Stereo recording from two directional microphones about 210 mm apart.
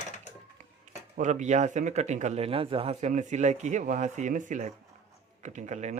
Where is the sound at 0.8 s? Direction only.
35° right (ahead or behind).